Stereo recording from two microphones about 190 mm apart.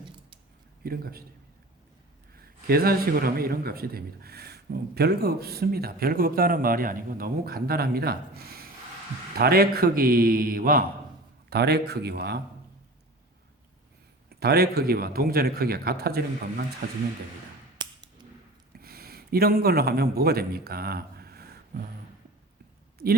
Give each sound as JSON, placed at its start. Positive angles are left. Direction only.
{"t": 0.9, "sound": "a man's voice", "side_deg": -55}
{"t": 2.6, "sound": "a man's voice", "side_deg": -50}
{"t": 11.4, "sound": "speech", "side_deg": -60}
{"t": 14.3, "sound": "a man's voice", "side_deg": -55}
{"t": 18.7, "sound": "a man's voice", "side_deg": -55}